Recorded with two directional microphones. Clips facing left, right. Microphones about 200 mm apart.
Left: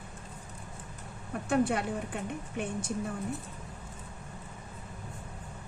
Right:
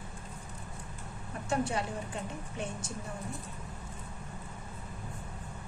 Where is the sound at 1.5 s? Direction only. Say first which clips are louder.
Left 4 dB; 55° left (ahead or behind).